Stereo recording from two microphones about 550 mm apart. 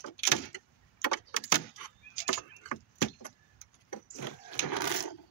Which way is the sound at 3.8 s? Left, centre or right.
Left.